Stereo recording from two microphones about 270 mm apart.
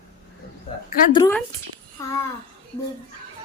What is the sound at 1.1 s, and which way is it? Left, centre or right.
Speech, centre.